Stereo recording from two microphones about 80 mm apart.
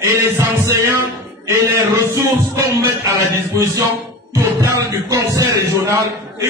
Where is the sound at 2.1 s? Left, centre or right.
Right.